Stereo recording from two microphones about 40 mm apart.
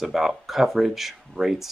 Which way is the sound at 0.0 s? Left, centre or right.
Centre.